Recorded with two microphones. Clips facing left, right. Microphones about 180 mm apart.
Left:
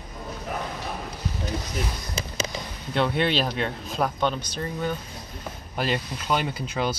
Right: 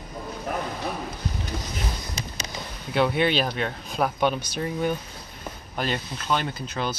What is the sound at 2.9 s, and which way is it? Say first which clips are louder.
Speech: right 1 dB; 5° right (ahead or behind).